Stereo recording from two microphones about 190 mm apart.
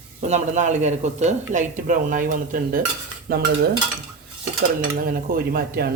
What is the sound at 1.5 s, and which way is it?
Dishes, 40° right (ahead or behind).